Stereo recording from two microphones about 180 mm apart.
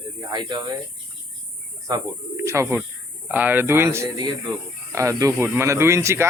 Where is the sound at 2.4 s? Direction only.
15° right (ahead or behind).